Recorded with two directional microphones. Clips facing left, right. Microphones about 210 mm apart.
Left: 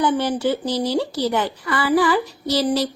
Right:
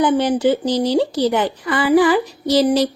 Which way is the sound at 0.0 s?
15° right (ahead or behind).